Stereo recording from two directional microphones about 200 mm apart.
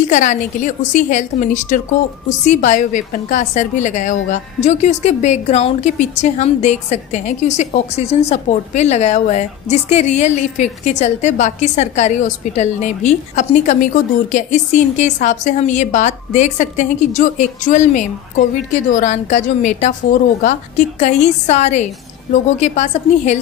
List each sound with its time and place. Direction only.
0.1 s a woman's voice: 40° left (ahead or behind)